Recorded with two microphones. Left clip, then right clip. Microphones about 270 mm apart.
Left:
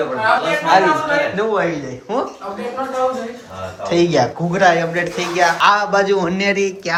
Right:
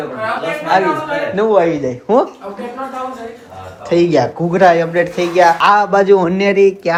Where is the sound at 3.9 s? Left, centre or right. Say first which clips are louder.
Right 3 dB; centre.